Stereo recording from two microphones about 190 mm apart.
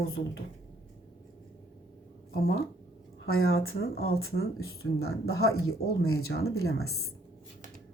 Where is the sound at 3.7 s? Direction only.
55° left (ahead or behind).